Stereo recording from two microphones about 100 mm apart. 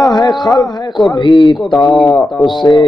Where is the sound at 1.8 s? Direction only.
50° left (ahead or behind).